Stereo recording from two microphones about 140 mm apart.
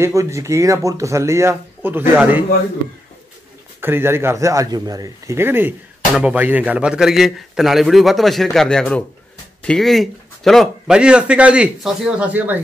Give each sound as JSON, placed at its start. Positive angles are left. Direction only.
{"t": 0.0, "sound": "speech", "side_deg": -20}
{"t": 3.8, "sound": "a man's voice", "side_deg": -15}